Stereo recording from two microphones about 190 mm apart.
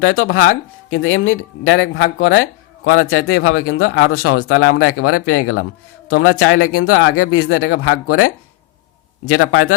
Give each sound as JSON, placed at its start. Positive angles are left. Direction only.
{"t": 0.0, "sound": "speech", "side_deg": 90}
{"t": 9.3, "sound": "speech", "side_deg": 90}